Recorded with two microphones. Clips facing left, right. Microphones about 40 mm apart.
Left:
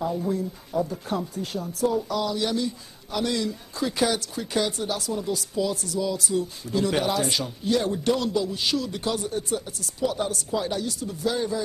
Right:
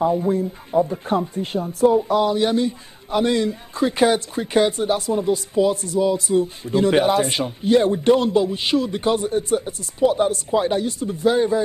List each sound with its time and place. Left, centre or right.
0.0 s speech: right